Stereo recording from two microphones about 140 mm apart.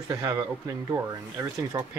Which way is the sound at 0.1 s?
25° right (ahead or behind).